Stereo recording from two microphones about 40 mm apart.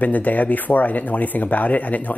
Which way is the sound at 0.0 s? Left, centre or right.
Left.